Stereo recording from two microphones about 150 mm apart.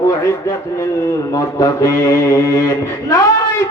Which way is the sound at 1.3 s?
20° left (ahead or behind).